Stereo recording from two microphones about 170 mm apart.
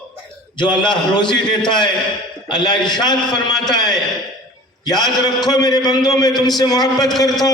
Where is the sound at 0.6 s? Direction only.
25° left (ahead or behind).